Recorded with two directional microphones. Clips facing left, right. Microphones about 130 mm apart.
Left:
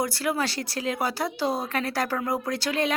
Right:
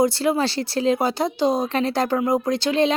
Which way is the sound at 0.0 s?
25° right (ahead or behind).